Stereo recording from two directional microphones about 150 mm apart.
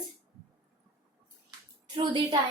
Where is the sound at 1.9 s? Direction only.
30° right (ahead or behind).